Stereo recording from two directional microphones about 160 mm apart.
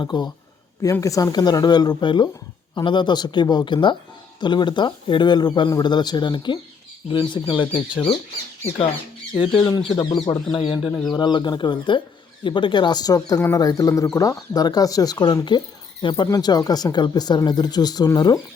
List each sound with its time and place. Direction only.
0.0 s speech: 25° left (ahead or behind)
9.3 s speech: 30° left (ahead or behind)